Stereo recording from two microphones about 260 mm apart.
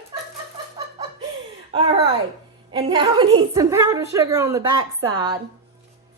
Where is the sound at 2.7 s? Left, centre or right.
Centre.